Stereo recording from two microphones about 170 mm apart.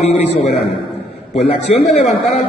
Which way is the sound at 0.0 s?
35° left (ahead or behind).